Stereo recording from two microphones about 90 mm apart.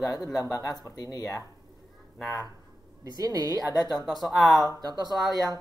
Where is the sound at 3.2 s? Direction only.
45° right (ahead or behind).